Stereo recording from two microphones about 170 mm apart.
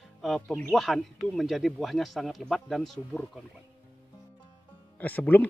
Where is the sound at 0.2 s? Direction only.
Centre (ahead or behind).